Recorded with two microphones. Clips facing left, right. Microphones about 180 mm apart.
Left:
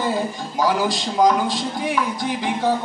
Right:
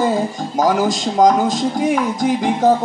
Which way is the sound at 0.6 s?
45° right (ahead or behind).